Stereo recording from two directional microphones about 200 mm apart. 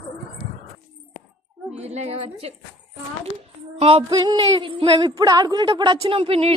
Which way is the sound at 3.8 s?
30° right (ahead or behind).